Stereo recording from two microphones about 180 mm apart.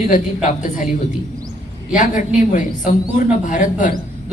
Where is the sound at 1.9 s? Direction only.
45° left (ahead or behind).